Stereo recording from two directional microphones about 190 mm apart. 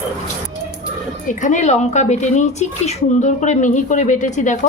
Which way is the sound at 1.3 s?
40° left (ahead or behind).